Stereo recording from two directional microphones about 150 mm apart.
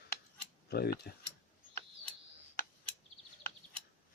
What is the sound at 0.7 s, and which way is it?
Cutlery, 90° left.